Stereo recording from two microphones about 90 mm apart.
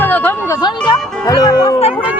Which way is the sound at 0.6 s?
50° left (ahead or behind).